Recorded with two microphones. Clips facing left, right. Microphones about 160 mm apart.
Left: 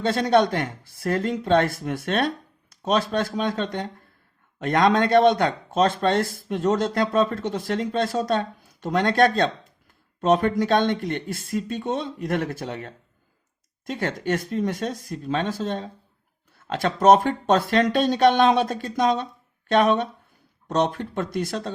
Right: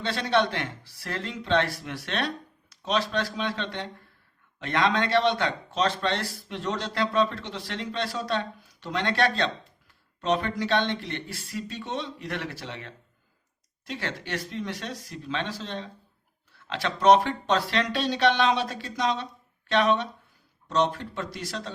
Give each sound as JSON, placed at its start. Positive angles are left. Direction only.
{"t": 0.0, "sound": "a man's voice", "side_deg": 45}